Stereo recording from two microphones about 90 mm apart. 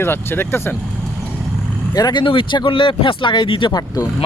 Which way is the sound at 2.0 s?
45° left (ahead or behind).